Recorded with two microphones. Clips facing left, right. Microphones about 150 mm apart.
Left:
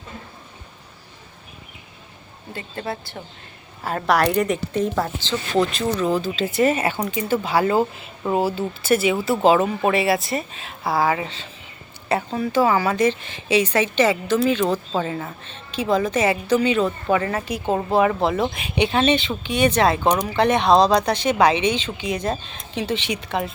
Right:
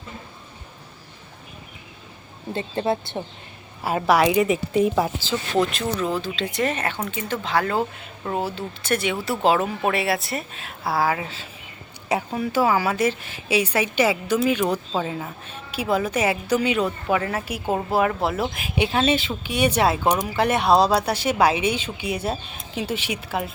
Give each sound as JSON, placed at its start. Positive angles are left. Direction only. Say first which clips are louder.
{"t": 2.5, "sound": "a woman's voice", "louder": "right 6 dB", "side_deg": -25}
{"t": 3.8, "sound": "a woman's voice", "louder": "right 1 dB", "side_deg": -5}